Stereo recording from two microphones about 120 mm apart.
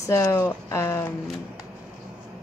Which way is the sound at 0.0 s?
25° left (ahead or behind).